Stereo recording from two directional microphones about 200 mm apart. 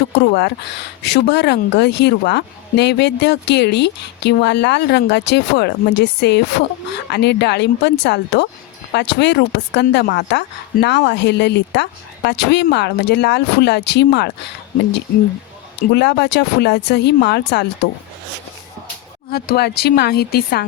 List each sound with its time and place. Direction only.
0.2 s speech: 55° left (ahead or behind)
15.9 s speech: 55° left (ahead or behind)
19.3 s speech: 50° left (ahead or behind)